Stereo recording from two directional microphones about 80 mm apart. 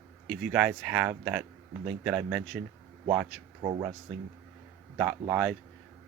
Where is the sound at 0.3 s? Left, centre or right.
Centre.